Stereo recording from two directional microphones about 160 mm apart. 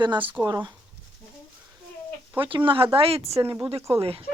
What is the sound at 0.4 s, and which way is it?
Speech, 25° right (ahead or behind).